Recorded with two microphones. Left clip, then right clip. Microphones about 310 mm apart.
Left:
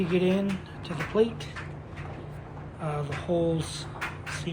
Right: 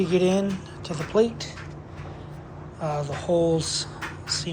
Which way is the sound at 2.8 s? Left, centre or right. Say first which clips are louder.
Right 5 dB; centre.